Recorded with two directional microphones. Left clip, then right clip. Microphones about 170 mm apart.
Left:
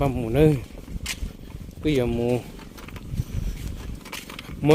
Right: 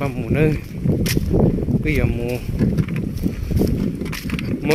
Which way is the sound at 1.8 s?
30° left (ahead or behind).